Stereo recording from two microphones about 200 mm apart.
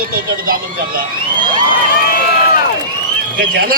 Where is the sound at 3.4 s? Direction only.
50° right (ahead or behind).